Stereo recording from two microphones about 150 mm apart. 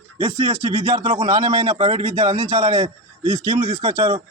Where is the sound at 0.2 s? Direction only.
30° right (ahead or behind).